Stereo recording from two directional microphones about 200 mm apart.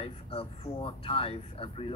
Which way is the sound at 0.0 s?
30° left (ahead or behind).